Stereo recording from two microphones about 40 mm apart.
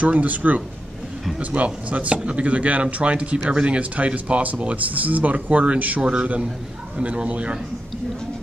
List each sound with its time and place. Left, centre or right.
0.0 s a man's voice: right